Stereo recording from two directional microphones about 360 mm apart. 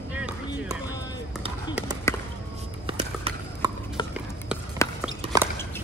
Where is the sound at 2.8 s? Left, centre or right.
Centre.